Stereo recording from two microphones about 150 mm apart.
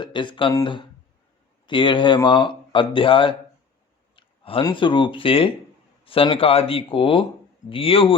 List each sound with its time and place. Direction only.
0.0 s speech: 30° left (ahead or behind)
4.1 s a sound: 35° left (ahead or behind)
4.6 s speech: 35° left (ahead or behind)